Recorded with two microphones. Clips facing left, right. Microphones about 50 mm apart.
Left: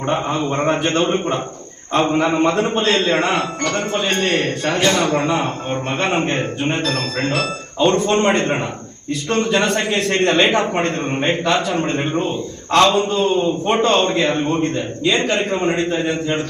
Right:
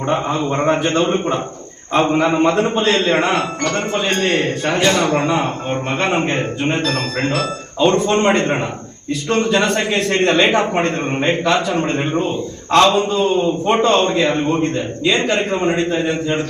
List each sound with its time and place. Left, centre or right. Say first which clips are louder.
0.1 s a man's voice: right 1 dB; centre
2.9 s a man's voice: even; centre
3.2 s a man's voice: right 1 dB; centre
8.1 s a man's voice: right 1 dB; centre
14.1 s a man's voice: right 1 dB; centre